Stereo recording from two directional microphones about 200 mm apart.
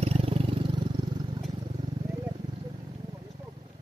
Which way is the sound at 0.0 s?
30° right (ahead or behind).